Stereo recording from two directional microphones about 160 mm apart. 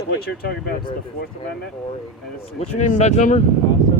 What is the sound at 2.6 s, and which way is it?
Speech, 50° left (ahead or behind).